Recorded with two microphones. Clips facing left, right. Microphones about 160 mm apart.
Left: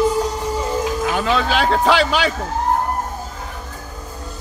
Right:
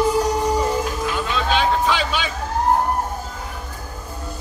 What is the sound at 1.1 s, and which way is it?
Speech, 65° left (ahead or behind).